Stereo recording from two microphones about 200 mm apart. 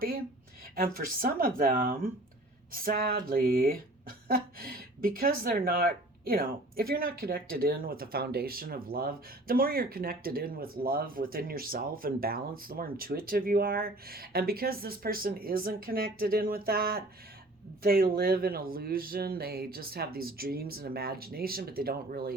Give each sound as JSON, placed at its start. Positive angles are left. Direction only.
{"t": 0.8, "sound": "speech", "side_deg": -45}